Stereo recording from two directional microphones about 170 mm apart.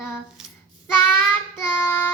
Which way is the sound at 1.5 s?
10° left (ahead or behind).